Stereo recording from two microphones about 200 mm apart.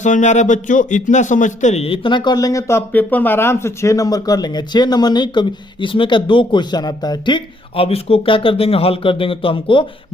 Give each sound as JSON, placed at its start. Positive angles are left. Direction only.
{"t": 0.0, "sound": "a man's voice", "side_deg": 35}